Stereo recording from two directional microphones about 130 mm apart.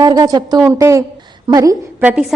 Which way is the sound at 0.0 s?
30° right (ahead or behind).